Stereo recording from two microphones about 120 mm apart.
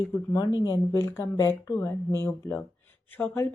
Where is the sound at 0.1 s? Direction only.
35° left (ahead or behind).